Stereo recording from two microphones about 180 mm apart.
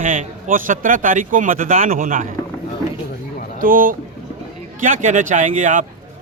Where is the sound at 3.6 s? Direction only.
50° right (ahead or behind).